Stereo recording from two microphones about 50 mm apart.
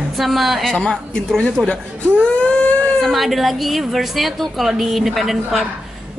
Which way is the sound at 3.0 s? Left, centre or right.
Centre.